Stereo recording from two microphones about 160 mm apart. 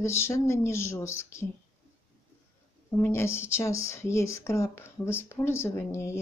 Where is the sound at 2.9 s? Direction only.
15° left (ahead or behind).